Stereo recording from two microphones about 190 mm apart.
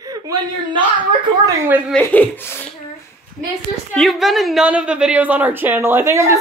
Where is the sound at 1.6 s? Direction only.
10° right (ahead or behind).